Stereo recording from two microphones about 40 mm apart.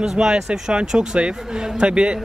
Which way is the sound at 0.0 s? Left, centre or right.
Centre.